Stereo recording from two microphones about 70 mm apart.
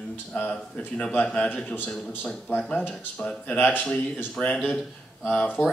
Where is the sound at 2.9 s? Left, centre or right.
Centre.